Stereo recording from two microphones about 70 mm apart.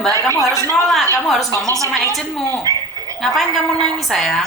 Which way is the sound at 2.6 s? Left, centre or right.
Right.